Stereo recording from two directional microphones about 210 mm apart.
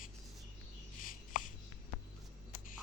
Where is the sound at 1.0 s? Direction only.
40° left (ahead or behind).